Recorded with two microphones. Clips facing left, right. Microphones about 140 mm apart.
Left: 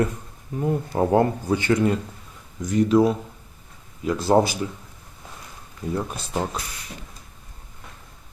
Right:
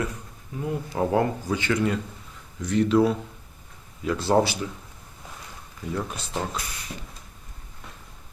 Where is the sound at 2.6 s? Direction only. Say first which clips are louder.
Left 2 dB; 45° left (ahead or behind).